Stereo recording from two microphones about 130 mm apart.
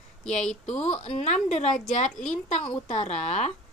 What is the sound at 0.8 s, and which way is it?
Speech, 55° left (ahead or behind).